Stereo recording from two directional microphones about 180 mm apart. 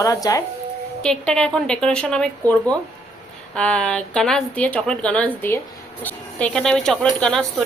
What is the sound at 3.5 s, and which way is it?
Speech, 5° left (ahead or behind).